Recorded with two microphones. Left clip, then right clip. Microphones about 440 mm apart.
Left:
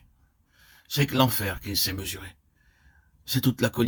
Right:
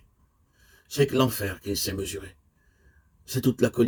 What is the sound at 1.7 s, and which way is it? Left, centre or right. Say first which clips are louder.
Speech: left 3 dB; left.